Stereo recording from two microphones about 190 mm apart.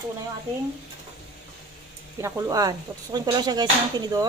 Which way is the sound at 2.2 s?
15° right (ahead or behind).